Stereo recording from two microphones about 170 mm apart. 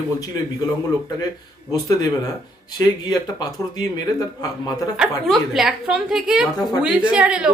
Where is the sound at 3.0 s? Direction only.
20° left (ahead or behind).